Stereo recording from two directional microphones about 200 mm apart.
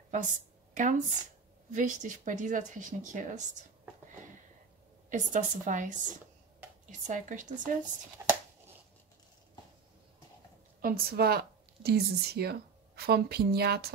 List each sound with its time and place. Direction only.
0.7 s speech: 40° right (ahead or behind)
5.1 s speech: 40° right (ahead or behind)
7.1 s speech: 40° right (ahead or behind)
8.2 s a sound: 10° right (ahead or behind)
10.8 s a woman's voice: 45° right (ahead or behind)